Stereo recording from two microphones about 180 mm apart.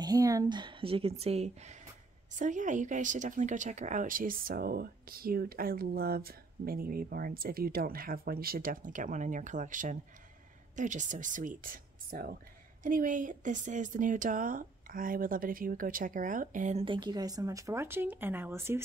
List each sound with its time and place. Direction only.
0.0 s a woman's voice: 20° right (ahead or behind); by 16.8 s 45° right (ahead or behind)
16.8 s speech: 25° right (ahead or behind)